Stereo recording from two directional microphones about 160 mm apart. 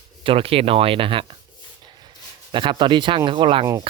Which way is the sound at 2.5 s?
30° right (ahead or behind).